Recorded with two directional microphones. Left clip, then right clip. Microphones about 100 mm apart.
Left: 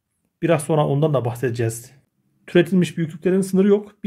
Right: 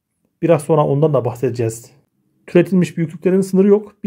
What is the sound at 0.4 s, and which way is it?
Speech, 35° right (ahead or behind).